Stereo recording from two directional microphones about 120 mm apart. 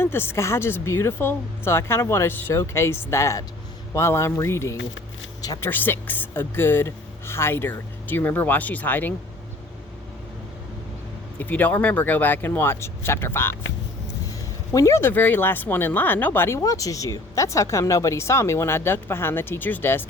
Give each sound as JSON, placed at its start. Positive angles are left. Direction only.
{"t": 0.0, "sound": "speech", "side_deg": 20}
{"t": 11.3, "sound": "speech", "side_deg": 15}